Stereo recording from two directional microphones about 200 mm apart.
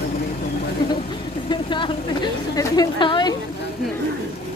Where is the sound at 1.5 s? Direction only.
25° left (ahead or behind).